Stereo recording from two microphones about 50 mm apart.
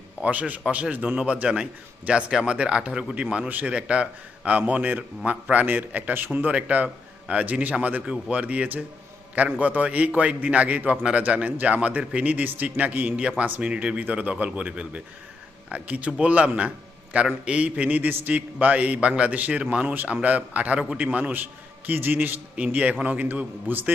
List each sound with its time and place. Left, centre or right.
0.2 s a man's voice: right
3.5 s a man's voice: right
6.5 s a man's voice: right
18.1 s a man's voice: right
18.3 s a man's voice: right
21.8 s a man's voice: right
23.6 s a man's voice: right